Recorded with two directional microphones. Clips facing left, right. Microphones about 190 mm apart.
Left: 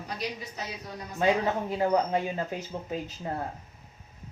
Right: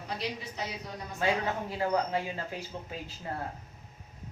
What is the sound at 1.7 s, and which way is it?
Speech, 20° left (ahead or behind).